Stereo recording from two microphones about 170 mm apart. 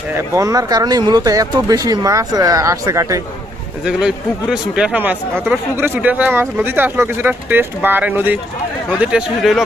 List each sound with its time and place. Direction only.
0.1 s speech: 20° right (ahead or behind)
3.8 s speech: 5° right (ahead or behind)